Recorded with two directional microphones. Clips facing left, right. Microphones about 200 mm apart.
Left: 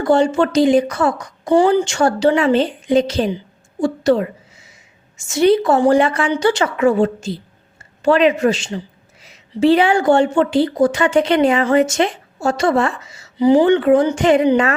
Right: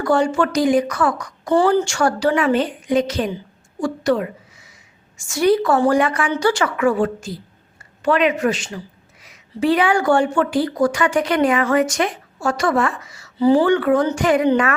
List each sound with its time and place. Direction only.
0.0 s a woman's voice: 25° left (ahead or behind)
3.8 s a sound: 25° left (ahead or behind)
5.1 s a woman's voice: 20° left (ahead or behind)